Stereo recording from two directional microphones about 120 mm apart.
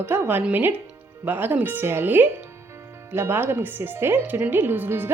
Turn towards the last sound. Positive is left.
turn(degrees=-15)  # may be behind; listen again after turning